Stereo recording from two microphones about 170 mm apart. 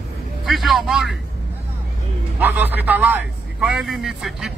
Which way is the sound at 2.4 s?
10° right (ahead or behind).